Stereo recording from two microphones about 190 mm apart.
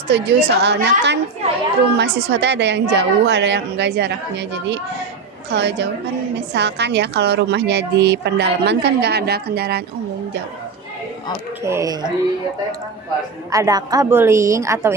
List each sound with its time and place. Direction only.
0.1 s a woman's voice: 60° right (ahead or behind)
11.6 s a woman's voice: 15° right (ahead or behind)
13.5 s a woman's voice: 20° right (ahead or behind)